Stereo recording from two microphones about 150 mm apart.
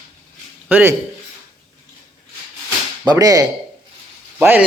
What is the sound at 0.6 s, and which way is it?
Speech, 10° right (ahead or behind).